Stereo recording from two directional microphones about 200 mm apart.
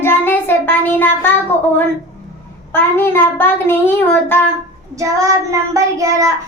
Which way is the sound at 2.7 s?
10° left (ahead or behind).